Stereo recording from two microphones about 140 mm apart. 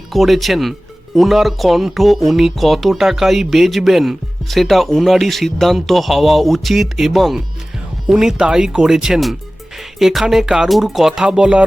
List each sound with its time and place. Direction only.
0.1 s speech: centre (ahead or behind)